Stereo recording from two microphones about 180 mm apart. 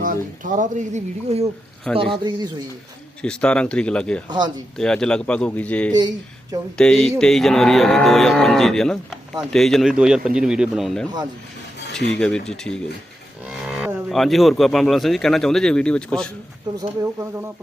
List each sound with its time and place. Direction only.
0.4 s speech: 45° right (ahead or behind)
2.0 s speech: 30° right (ahead or behind)
3.2 s livestock: 5° left (ahead or behind)
4.3 s speech: 25° right (ahead or behind)
4.8 s speech: 5° left (ahead or behind)
6.7 s livestock: 5° left (ahead or behind)
12.1 s livestock: 5° left (ahead or behind)
13.4 s cattle: 5° right (ahead or behind)
16.7 s speech: 15° right (ahead or behind)